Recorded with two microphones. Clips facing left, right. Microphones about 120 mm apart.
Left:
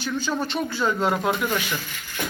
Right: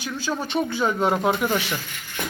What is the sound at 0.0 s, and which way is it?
Speech, 5° right (ahead or behind).